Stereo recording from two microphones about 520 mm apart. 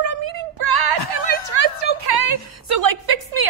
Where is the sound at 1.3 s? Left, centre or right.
Right.